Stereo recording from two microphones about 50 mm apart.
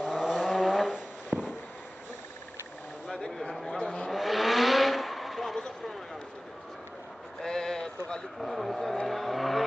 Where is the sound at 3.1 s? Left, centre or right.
Centre.